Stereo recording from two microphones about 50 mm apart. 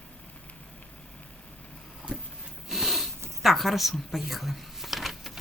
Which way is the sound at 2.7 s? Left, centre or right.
Centre.